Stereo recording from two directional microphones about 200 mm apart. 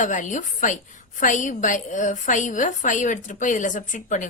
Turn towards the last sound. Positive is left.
turn(degrees=40)  # may be behind; listen again after turning